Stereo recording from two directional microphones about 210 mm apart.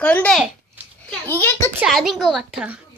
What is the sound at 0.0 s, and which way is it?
Speech, 5° left (ahead or behind).